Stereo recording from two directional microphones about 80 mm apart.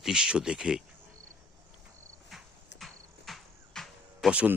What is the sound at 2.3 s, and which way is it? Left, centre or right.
Music, centre.